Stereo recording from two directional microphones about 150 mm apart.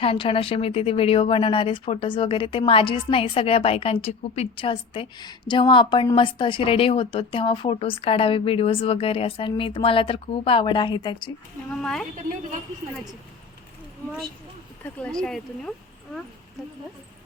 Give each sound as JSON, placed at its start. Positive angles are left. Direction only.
{"t": 0.0, "sound": "speech", "side_deg": 35}
{"t": 11.7, "sound": "speech", "side_deg": 5}
{"t": 14.9, "sound": "speech", "side_deg": 5}